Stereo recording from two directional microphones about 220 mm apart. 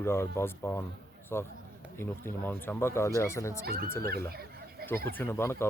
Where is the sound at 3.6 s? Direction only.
45° right (ahead or behind).